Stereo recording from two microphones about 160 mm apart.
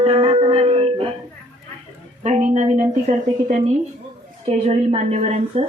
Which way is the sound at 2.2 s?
45° right (ahead or behind).